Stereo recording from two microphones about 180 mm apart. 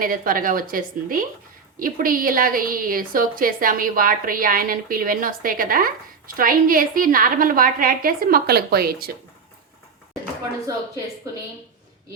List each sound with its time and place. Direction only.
0.0 s a woman's voice: 50° right (ahead or behind)